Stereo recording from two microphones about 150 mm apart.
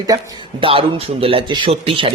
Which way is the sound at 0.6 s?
40° right (ahead or behind).